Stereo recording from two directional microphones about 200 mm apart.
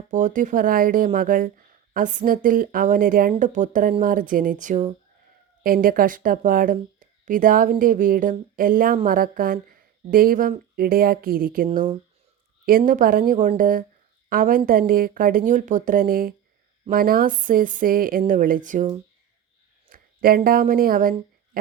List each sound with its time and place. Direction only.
0.1 s a woman's voice: 40° right (ahead or behind)
19.9 s a woman's voice: 45° right (ahead or behind)